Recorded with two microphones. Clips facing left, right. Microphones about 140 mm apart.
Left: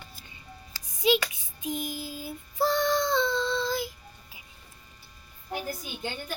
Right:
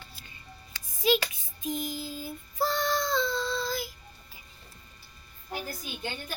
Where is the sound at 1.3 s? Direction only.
15° left (ahead or behind).